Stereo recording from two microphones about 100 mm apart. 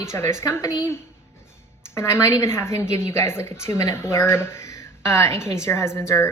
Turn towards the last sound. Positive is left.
turn(degrees=30)  # may be behind; listen again after turning